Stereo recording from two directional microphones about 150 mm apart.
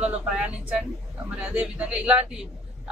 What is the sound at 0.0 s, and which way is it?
Speech, 5° right (ahead or behind).